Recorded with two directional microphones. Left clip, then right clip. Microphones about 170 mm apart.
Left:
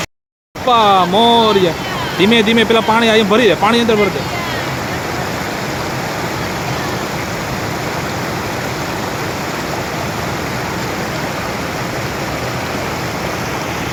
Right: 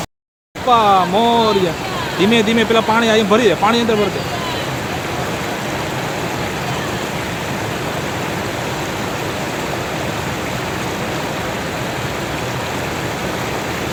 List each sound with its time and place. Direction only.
0.7 s speech: 20° left (ahead or behind)